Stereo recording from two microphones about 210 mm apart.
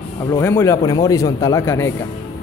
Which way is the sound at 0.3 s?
10° left (ahead or behind).